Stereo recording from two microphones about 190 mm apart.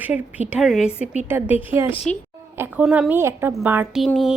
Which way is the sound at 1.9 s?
30° left (ahead or behind).